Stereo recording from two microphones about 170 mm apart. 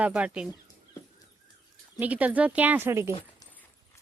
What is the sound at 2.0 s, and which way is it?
Speech, 10° right (ahead or behind).